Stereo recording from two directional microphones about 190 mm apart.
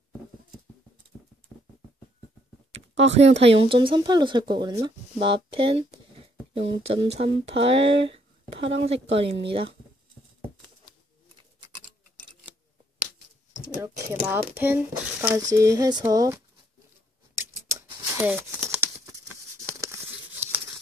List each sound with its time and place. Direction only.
2.7 s a sound: 70° right (ahead or behind)
3.2 s speech: 35° right (ahead or behind)
13.7 s a sound: 15° right (ahead or behind)
15.5 s speech: 15° right (ahead or behind)
17.4 s scissors: 15° right (ahead or behind)
19.8 s tearing: 10° right (ahead or behind)